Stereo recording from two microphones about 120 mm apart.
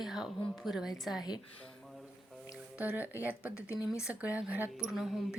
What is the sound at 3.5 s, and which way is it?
Speech, 20° left (ahead or behind).